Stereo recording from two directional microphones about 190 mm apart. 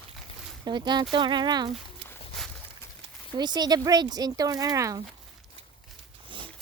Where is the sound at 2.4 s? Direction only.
Centre (ahead or behind).